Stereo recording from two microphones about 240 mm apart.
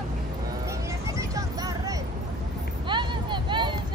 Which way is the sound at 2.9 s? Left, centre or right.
Centre.